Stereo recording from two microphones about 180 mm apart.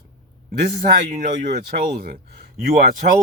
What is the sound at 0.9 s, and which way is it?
Speech, 55° right (ahead or behind).